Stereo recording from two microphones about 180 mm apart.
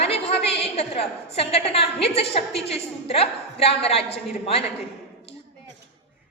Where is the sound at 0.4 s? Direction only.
35° left (ahead or behind).